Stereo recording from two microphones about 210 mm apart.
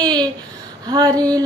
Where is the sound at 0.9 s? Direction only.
20° right (ahead or behind).